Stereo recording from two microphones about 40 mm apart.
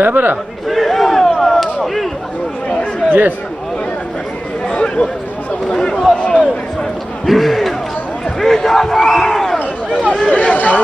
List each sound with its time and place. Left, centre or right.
0.0 s a man's voice: right
0.7 s battle cry: centre
3.1 s speech: right
4.6 s chatter: left
5.7 s a sound: centre
6.1 s a sound: left
7.2 s a sound: centre
8.5 s crowd: centre
10.3 s speech: left